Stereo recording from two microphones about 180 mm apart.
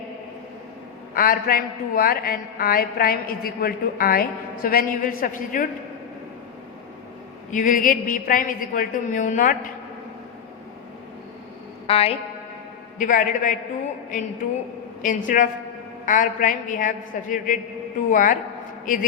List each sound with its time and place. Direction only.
1.1 s a man's voice: 55° left (ahead or behind)
7.5 s a woman's voice: 50° left (ahead or behind)
11.9 s a woman's voice: 35° left (ahead or behind)
13.0 s a woman's voice: 45° left (ahead or behind)
15.0 s a woman's voice: 45° left (ahead or behind)